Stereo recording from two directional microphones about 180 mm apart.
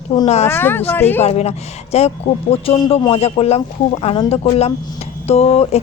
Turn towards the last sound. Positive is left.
turn(degrees=35)  # may be behind; listen again after turning